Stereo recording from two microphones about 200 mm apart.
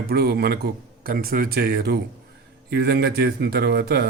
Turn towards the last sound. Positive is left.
turn(degrees=-55)  # may be behind; listen again after turning